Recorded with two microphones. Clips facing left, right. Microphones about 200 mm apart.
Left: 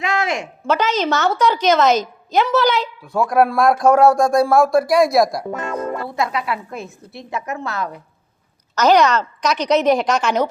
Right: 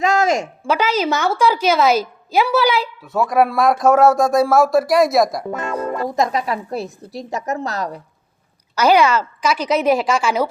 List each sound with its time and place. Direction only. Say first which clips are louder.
0.0 s a sound: right 5 dB; 40° right (ahead or behind)
0.6 s a woman's voice: left 3 dB; 10° right (ahead or behind)
6.0 s a woman's voice: right 3 dB; 40° right (ahead or behind)
8.7 s a woman's voice: even; 10° right (ahead or behind)